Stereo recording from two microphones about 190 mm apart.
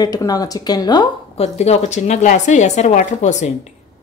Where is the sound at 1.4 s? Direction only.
35° left (ahead or behind).